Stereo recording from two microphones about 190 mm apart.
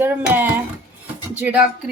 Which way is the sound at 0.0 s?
10° right (ahead or behind).